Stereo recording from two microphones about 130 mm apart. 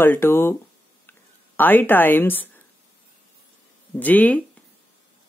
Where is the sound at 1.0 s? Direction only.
15° left (ahead or behind).